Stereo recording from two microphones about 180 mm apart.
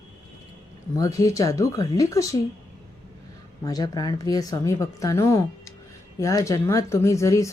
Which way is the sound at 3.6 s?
20° left (ahead or behind).